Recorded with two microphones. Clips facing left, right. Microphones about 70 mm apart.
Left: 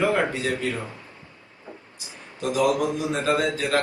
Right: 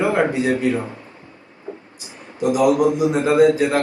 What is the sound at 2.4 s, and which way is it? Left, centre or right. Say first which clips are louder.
Speech: right 6 dB; centre.